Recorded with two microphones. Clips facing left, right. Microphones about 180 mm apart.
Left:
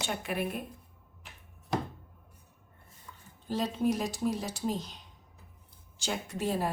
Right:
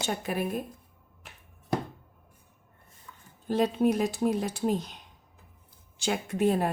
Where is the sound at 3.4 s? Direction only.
55° right (ahead or behind).